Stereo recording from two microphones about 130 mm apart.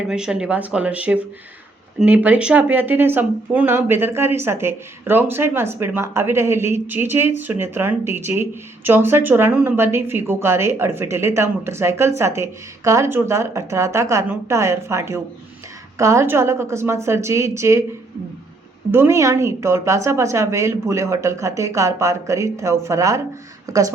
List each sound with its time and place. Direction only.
0.1 s speech: 5° right (ahead or behind); by 17.8 s 20° right (ahead or behind)
18.9 s speech: 20° right (ahead or behind)